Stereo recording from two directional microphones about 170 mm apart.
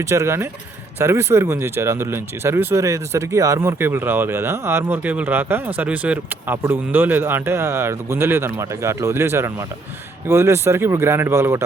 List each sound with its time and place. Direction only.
0.1 s speech: 15° right (ahead or behind)